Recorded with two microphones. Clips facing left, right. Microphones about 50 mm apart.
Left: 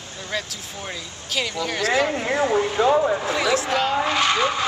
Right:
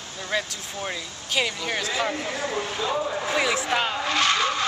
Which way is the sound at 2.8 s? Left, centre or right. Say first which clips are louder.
Left 10 dB; left.